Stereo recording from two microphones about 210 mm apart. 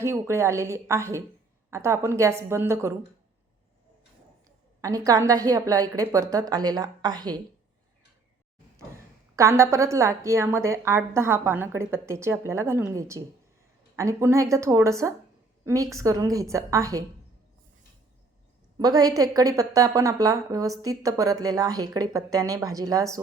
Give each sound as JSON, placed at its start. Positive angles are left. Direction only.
{"t": 0.0, "sound": "a woman's voice", "side_deg": -15}
{"t": 4.4, "sound": "a woman's voice", "side_deg": -15}
{"t": 9.3, "sound": "a woman's voice", "side_deg": -15}
{"t": 18.8, "sound": "a woman's voice", "side_deg": -15}